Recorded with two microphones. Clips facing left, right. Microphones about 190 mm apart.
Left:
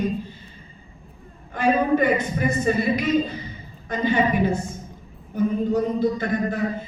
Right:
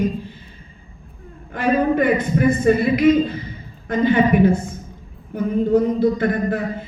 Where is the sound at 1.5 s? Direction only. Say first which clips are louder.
Right 2 dB; 55° right (ahead or behind).